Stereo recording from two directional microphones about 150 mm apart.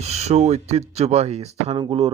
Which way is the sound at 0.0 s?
45° right (ahead or behind).